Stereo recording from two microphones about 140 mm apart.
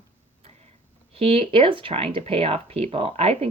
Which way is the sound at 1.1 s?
45° right (ahead or behind).